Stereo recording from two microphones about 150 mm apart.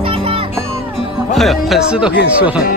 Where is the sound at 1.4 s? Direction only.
Centre (ahead or behind).